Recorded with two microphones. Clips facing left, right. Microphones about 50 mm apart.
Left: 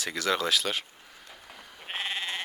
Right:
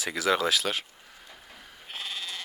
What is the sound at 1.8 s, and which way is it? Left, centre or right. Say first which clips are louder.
Sheep: left 4 dB; left.